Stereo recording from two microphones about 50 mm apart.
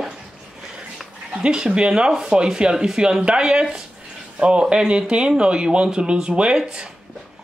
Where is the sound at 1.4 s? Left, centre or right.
Centre.